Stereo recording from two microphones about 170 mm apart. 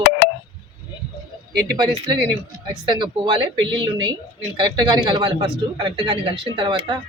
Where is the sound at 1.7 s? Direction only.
25° right (ahead or behind).